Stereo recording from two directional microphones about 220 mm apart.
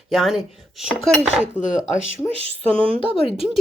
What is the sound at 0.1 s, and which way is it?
Speech, centre (ahead or behind).